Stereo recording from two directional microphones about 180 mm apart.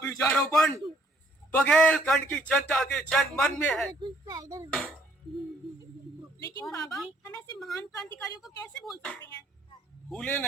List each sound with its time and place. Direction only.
0.0 s a sound: 15° left (ahead or behind)
0.3 s a man's voice: centre (ahead or behind)
4.0 s speech: 20° right (ahead or behind)
6.6 s a woman's voice: 20° left (ahead or behind)
8.4 s a man's voice: centre (ahead or behind)